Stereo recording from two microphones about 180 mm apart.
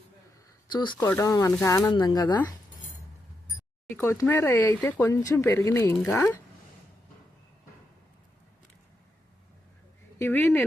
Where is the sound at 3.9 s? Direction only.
15° left (ahead or behind).